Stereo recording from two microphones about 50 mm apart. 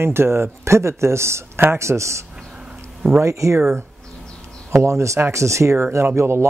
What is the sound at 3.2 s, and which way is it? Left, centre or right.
Speech, right.